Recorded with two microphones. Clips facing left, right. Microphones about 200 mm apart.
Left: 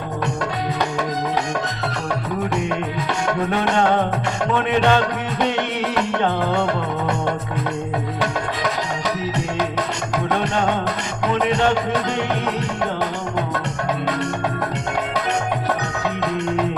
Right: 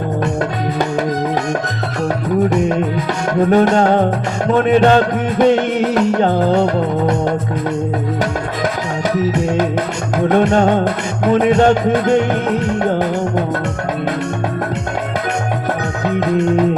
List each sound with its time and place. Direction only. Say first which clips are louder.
3.5 s music: right 7 dB; 40° right (ahead or behind)
10.2 s music: right 9 dB; 45° right (ahead or behind)